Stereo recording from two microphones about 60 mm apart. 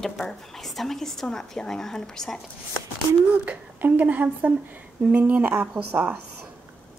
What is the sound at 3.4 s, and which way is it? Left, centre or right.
A woman's voice, right.